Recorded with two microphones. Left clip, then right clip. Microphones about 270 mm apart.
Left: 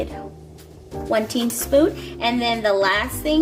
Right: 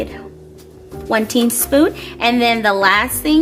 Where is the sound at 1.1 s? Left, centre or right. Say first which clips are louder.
Right 5 dB; right.